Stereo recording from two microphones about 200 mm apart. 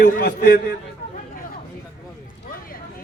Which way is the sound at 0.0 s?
45° left (ahead or behind).